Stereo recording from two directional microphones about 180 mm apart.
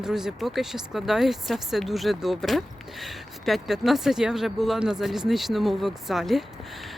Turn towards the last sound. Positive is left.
turn(degrees=0)  # may be behind; listen again after turning